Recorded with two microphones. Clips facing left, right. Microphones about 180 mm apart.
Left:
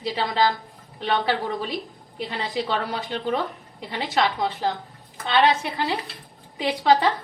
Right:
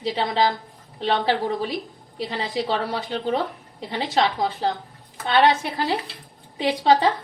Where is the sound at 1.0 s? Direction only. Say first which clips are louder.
Right 2 dB; 35° right (ahead or behind).